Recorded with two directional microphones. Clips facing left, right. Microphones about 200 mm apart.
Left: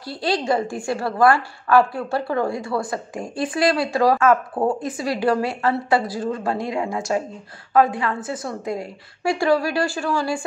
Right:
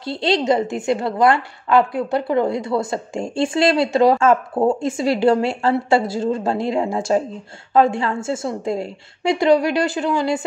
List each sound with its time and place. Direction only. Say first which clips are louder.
0.0 s a woman's voice: right 4 dB; 25° right (ahead or behind)